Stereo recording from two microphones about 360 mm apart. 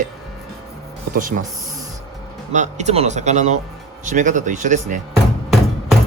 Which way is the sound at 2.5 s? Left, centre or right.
Centre.